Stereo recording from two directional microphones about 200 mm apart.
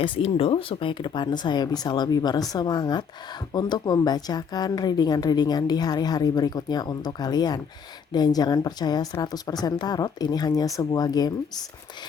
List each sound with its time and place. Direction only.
0.0 s a woman's voice: 25° left (ahead or behind)